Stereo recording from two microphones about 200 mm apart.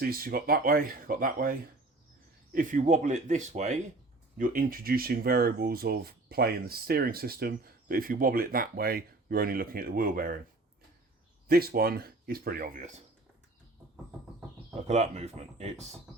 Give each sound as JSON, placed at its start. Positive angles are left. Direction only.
{"t": 0.0, "sound": "speech", "side_deg": -50}
{"t": 11.4, "sound": "speech", "side_deg": -50}
{"t": 14.8, "sound": "speech", "side_deg": -35}